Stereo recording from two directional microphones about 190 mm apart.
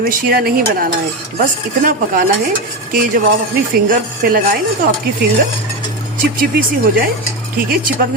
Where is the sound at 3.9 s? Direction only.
50° right (ahead or behind).